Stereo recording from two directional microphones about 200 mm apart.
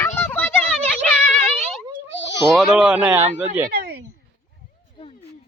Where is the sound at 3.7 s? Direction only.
50° right (ahead or behind).